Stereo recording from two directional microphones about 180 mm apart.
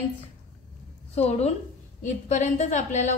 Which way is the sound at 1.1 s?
35° left (ahead or behind).